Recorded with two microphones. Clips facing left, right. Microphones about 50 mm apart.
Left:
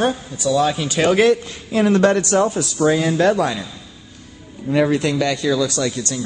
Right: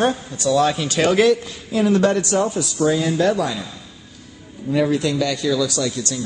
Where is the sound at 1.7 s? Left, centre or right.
Left.